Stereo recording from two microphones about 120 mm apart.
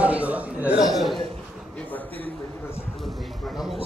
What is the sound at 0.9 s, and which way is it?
Speech, centre (ahead or behind).